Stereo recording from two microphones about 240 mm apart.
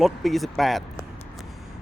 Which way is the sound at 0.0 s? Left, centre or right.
Centre.